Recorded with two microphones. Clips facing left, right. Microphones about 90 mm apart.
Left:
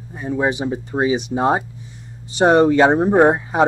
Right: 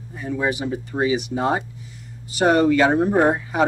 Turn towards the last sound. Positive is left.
turn(degrees=25)  # may be behind; listen again after turning